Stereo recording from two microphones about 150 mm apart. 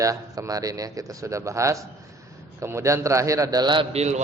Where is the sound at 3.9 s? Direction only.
50° right (ahead or behind).